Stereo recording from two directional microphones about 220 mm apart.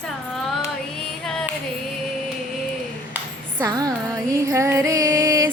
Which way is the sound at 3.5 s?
15° right (ahead or behind).